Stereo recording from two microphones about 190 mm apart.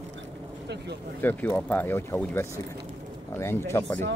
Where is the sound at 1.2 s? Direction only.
10° left (ahead or behind).